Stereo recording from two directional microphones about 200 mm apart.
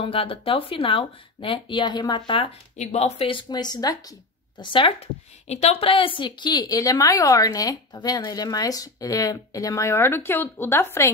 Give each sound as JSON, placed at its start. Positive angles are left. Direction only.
{"t": 0.0, "sound": "speech", "side_deg": 30}